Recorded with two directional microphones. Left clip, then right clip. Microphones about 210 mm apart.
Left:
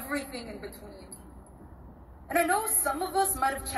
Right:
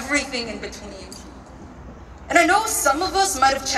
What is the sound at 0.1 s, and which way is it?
Speech, 5° left (ahead or behind).